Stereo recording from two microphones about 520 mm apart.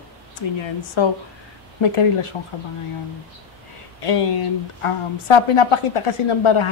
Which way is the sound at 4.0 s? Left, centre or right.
Left.